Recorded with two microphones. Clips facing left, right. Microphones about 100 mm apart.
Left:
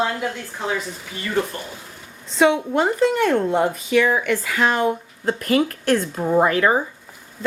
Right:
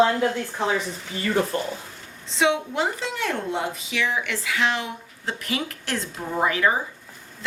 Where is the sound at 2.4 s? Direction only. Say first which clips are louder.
Left 5 dB; 50° left (ahead or behind).